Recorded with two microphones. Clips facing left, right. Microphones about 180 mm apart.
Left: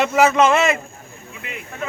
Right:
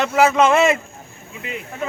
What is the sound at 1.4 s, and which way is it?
Speech, 25° right (ahead or behind).